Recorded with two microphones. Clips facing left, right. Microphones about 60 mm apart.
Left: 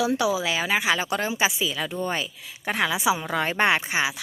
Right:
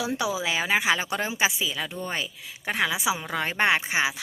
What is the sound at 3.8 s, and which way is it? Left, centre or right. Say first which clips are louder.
Speech: even; centre.